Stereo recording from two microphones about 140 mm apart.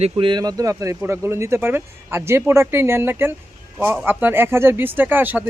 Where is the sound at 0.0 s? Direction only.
35° right (ahead or behind).